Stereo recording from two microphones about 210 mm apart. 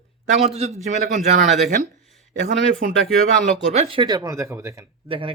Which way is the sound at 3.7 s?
30° right (ahead or behind).